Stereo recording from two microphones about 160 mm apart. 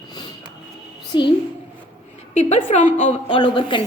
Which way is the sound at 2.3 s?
40° left (ahead or behind).